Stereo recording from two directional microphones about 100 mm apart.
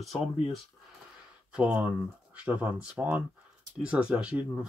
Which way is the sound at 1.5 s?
10° right (ahead or behind).